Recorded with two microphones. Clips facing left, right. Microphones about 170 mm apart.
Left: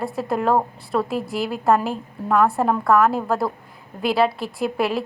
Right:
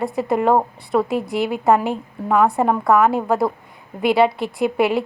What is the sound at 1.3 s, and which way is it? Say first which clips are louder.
Speech: right 5 dB; 65° right (ahead or behind).